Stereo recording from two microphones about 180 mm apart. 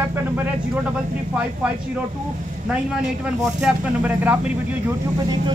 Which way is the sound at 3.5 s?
5° right (ahead or behind).